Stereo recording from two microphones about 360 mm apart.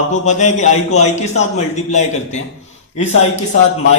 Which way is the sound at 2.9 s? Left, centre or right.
Left.